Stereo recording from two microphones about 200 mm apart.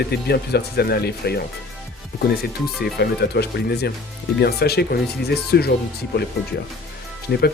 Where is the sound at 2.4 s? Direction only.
50° left (ahead or behind).